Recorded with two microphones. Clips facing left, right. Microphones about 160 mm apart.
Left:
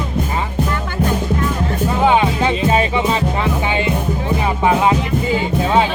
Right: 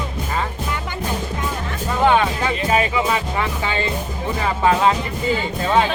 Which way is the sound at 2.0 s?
20° left (ahead or behind).